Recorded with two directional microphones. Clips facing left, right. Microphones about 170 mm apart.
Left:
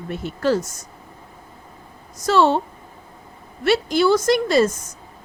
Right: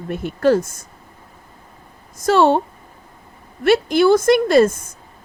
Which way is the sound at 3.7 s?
55° right (ahead or behind).